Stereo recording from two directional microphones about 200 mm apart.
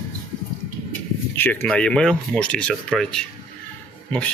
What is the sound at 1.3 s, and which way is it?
Speech, 10° left (ahead or behind).